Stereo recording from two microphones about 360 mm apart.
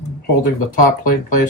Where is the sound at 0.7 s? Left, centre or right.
Left.